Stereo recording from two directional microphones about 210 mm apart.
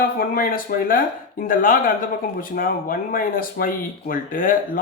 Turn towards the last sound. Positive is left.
turn(degrees=40)  # may be behind; listen again after turning